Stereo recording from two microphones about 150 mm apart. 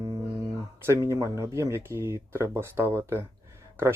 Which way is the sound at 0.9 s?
20° right (ahead or behind).